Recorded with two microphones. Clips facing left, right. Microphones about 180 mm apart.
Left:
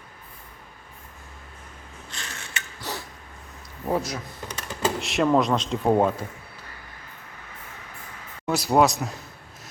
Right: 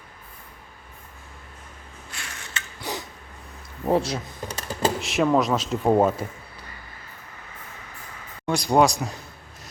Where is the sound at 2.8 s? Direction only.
15° right (ahead or behind).